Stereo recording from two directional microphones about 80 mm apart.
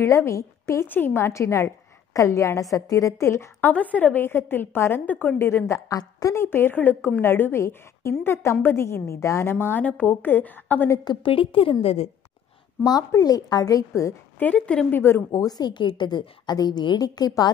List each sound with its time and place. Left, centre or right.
0.0 s a woman's voice: left
0.8 s a woman's voice: left
3.6 s a woman's voice: centre
5.7 s a woman's voice: left
6.3 s a woman's voice: left
11.1 s a woman's voice: left
12.8 s a woman's voice: left
14.4 s a woman's voice: centre
14.9 s a woman's voice: left
15.3 s a woman's voice: left